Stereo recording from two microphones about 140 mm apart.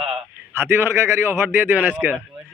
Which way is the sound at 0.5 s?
15° right (ahead or behind).